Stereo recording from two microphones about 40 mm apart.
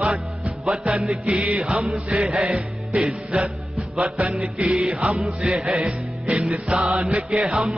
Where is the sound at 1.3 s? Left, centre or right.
Right.